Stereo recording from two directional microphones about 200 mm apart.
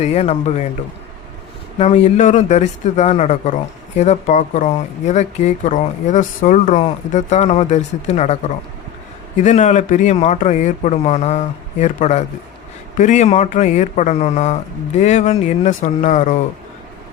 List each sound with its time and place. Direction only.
0.0 s speech: 30° left (ahead or behind)
1.8 s speech: 35° left (ahead or behind)
9.4 s speech: 35° left (ahead or behind)